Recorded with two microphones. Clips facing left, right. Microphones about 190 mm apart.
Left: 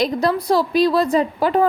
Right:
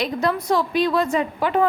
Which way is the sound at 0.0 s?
35° left (ahead or behind).